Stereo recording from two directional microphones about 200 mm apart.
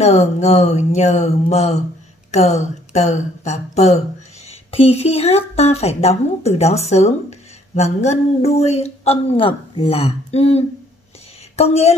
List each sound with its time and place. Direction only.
0.0 s a woman's voice: 35° left (ahead or behind)